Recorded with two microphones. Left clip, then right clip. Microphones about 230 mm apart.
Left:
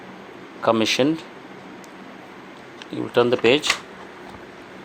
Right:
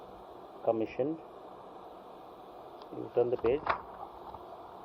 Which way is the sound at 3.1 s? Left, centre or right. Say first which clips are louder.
Left 12 dB; left.